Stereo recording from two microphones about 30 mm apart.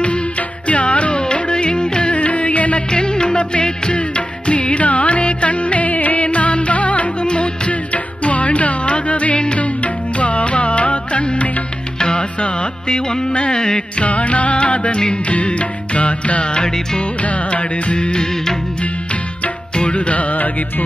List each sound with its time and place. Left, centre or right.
0.0 s music: left
2.1 s music: left
2.9 s music: left
6.2 s music: left
7.2 s music: left
12.0 s music: left
12.9 s music: left
14.0 s music: left
16.5 s music: left
17.0 s music: left
18.3 s music: centre
19.7 s music: left
20.0 s music: left